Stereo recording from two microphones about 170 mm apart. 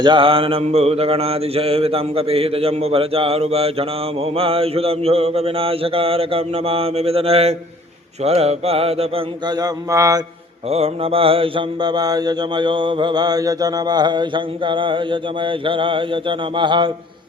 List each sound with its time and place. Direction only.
0.0 s mantra: 30° right (ahead or behind)
9.5 s mantra: 25° right (ahead or behind)
10.7 s mantra: 35° right (ahead or behind)